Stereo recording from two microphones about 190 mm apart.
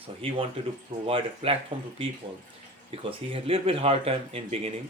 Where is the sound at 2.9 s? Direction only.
30° right (ahead or behind).